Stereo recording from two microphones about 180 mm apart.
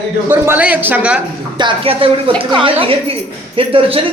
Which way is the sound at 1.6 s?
30° right (ahead or behind).